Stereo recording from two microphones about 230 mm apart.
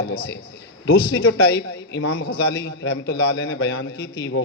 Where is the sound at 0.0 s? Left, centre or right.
Left.